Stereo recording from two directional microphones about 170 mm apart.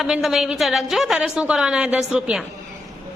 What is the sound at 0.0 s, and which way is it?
A woman's voice, centre (ahead or behind).